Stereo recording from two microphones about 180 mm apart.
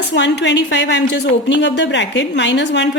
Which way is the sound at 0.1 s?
75° left (ahead or behind).